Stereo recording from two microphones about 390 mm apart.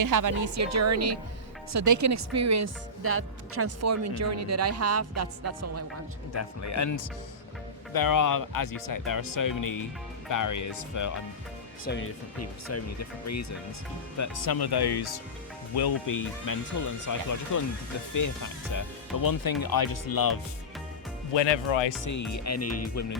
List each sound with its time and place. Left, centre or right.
0.0 s speech: right
6.3 s speech: left
11.9 s speech: left
14.2 s speech: left
16.0 s speech: left
21.3 s speech: left
22.0 s speech: left